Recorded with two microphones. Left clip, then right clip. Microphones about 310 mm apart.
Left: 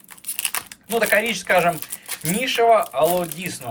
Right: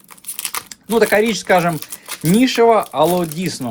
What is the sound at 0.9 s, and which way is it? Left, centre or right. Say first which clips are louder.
Speech: right 5 dB; centre.